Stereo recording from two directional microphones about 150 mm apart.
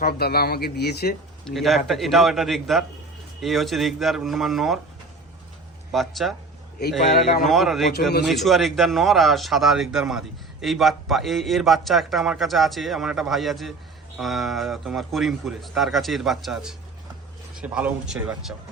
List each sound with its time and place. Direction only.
0.0 s a man's voice: 90° left
1.5 s speech: centre (ahead or behind)
5.9 s speech: centre (ahead or behind)
7.4 s speech: centre (ahead or behind)